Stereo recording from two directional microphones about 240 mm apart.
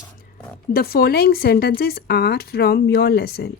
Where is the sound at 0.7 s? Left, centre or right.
Left.